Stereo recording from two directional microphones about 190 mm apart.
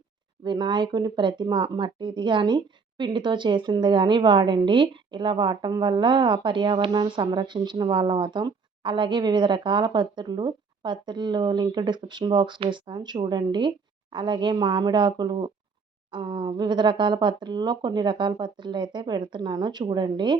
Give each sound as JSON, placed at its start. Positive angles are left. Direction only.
{"t": 0.4, "sound": "speech", "side_deg": -25}